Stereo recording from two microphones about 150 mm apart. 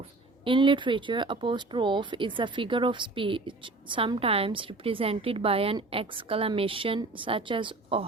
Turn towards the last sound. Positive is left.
turn(degrees=-35)  # may be behind; listen again after turning